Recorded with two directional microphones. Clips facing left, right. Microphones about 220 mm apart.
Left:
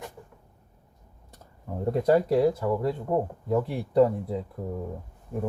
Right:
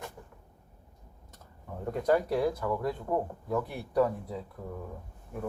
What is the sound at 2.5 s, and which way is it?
Speech, 25° left (ahead or behind).